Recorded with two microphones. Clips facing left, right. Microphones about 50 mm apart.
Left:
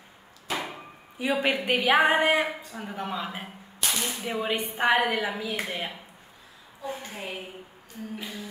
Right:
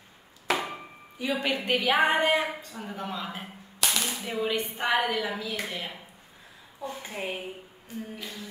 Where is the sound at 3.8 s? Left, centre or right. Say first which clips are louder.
Right 1 dB; right.